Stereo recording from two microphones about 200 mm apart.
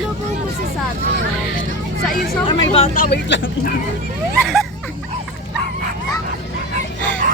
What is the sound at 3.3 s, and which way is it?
Speech, 70° left (ahead or behind).